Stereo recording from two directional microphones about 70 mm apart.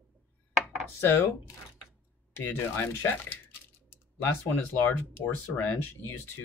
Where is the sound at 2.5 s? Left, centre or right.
Left.